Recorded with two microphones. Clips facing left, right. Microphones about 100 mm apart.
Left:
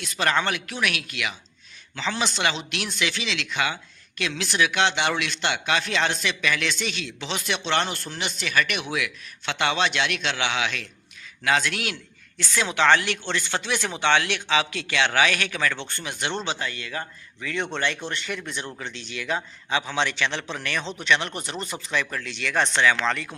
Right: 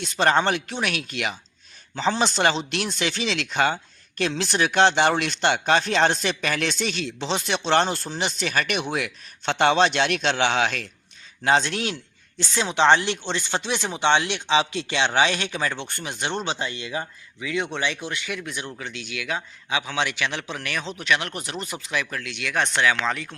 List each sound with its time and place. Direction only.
0.0 s a man's voice: 30° right (ahead or behind); by 23.3 s 5° right (ahead or behind)